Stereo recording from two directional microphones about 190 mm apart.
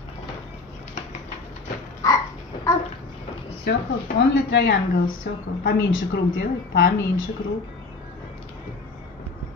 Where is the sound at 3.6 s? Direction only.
65° left (ahead or behind).